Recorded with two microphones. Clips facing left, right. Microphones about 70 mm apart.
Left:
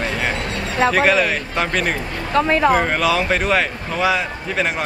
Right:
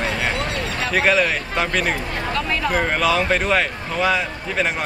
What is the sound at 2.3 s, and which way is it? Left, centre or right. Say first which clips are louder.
Speech: left 9 dB; left.